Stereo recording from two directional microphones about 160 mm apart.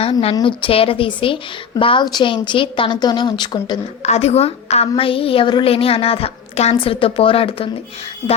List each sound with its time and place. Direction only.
0.0 s a woman's voice: 35° left (ahead or behind)
4.0 s a woman's voice: 45° left (ahead or behind)